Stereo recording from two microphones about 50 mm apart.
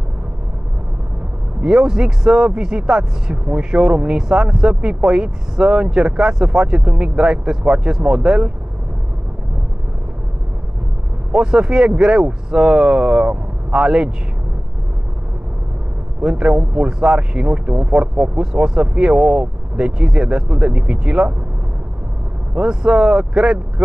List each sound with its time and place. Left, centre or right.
1.6 s speech: centre
11.3 s speech: centre
16.2 s speech: centre
22.5 s speech: centre